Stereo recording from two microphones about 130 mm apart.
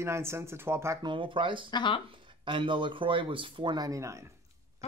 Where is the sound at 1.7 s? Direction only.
35° left (ahead or behind).